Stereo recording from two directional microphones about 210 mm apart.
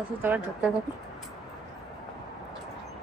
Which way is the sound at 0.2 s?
10° right (ahead or behind).